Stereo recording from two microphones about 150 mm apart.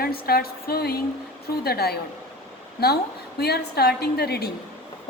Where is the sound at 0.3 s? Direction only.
90° left.